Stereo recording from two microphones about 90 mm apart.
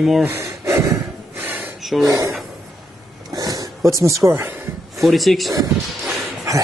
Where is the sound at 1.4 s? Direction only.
20° right (ahead or behind).